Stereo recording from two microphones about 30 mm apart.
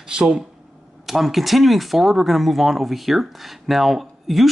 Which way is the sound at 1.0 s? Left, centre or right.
Centre.